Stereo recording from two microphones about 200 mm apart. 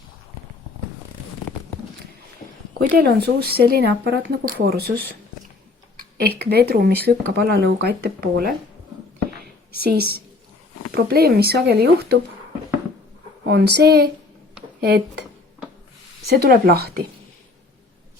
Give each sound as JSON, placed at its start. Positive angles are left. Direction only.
{"t": 2.8, "sound": "speech", "side_deg": -50}
{"t": 6.4, "sound": "speech", "side_deg": -50}
{"t": 9.8, "sound": "speech", "side_deg": -50}
{"t": 13.5, "sound": "speech", "side_deg": -55}
{"t": 16.3, "sound": "speech", "side_deg": -55}